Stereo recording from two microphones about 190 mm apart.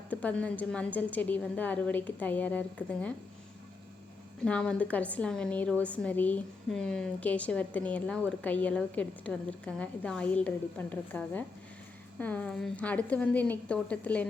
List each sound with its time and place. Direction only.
0.1 s a woman's voice: 5° left (ahead or behind)
4.4 s a woman's voice: 5° left (ahead or behind)